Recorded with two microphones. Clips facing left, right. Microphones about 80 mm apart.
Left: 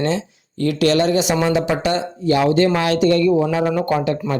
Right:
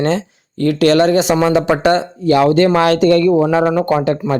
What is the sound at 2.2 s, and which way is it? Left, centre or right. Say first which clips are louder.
Speech: right 4 dB; right.